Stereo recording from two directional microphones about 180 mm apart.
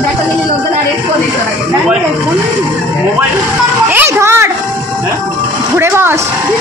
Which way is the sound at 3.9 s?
15° right (ahead or behind).